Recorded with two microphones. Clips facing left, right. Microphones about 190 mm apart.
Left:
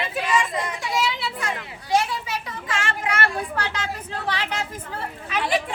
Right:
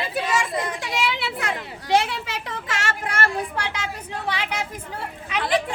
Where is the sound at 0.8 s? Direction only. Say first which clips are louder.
Left 1 dB; 65° right (ahead or behind).